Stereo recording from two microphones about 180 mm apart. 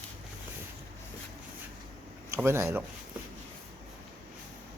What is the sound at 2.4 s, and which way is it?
Speech, 15° right (ahead or behind).